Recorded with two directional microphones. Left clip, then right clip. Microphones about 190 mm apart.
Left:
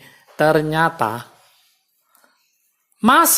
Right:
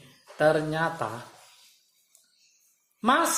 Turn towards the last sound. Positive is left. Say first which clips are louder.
# left 10 dB
turn(degrees=50)  # may be behind; listen again after turning